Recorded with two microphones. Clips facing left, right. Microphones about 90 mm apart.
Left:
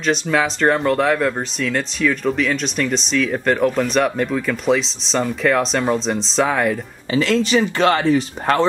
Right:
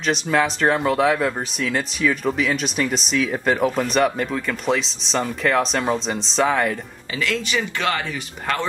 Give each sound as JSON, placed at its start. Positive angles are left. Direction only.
{"t": 0.0, "sound": "speech", "side_deg": 0}
{"t": 7.2, "sound": "speech", "side_deg": 30}